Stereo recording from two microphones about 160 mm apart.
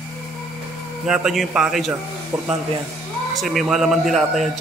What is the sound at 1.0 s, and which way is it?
Speech, 5° right (ahead or behind).